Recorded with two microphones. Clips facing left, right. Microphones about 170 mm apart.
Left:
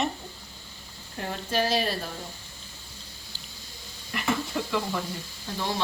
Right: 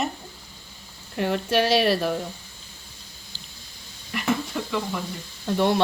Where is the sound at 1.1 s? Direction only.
70° right (ahead or behind).